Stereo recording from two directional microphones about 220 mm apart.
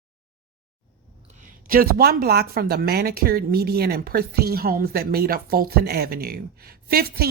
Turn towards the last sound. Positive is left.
turn(degrees=-45)  # may be behind; listen again after turning